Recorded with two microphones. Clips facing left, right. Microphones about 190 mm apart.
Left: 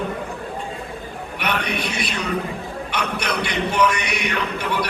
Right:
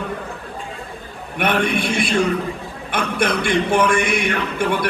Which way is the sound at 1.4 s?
50° right (ahead or behind).